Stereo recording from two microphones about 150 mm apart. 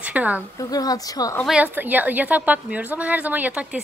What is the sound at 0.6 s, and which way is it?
Speech, 25° left (ahead or behind).